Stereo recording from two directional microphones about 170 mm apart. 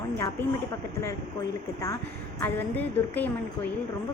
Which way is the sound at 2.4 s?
10° left (ahead or behind).